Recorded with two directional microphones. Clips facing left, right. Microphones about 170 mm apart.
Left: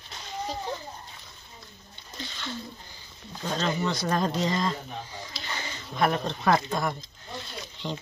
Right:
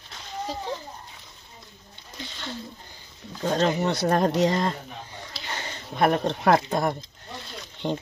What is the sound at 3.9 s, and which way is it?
Speech, 60° right (ahead or behind).